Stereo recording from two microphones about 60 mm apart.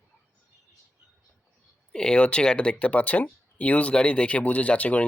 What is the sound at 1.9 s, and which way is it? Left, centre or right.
Speech, centre.